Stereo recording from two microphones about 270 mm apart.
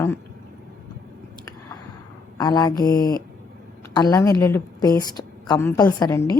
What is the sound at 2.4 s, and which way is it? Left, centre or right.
A woman's voice, centre.